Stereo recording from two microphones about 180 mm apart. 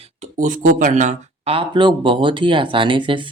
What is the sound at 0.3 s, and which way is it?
Speech, 45° right (ahead or behind).